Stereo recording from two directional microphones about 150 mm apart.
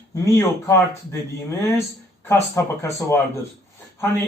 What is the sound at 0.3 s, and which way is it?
Speech, 20° left (ahead or behind).